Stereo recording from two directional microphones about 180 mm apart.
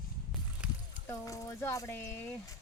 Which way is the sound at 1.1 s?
20° left (ahead or behind).